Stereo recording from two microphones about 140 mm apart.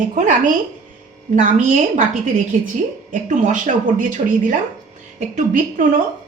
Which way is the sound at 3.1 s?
65° right (ahead or behind).